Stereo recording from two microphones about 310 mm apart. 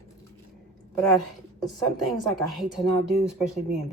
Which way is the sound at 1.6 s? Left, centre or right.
Centre.